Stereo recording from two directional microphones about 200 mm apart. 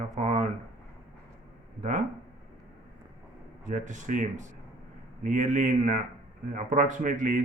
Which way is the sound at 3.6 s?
40° right (ahead or behind).